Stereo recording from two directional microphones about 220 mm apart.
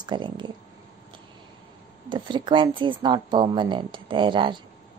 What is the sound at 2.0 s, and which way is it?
Speech, 20° right (ahead or behind).